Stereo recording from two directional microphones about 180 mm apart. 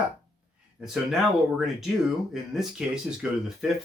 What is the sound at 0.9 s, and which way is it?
Speech, centre (ahead or behind).